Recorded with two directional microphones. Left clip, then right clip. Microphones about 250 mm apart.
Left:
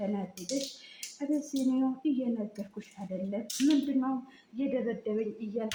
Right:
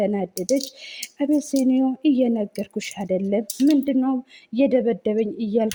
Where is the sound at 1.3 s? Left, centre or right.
Right.